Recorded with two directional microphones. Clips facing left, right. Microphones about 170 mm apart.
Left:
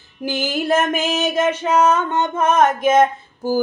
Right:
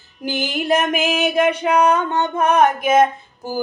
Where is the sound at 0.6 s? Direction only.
15° right (ahead or behind).